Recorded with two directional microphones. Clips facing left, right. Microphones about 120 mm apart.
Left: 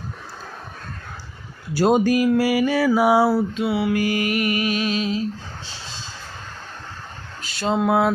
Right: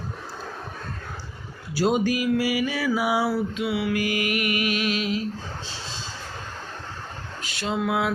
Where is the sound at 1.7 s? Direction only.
45° left (ahead or behind).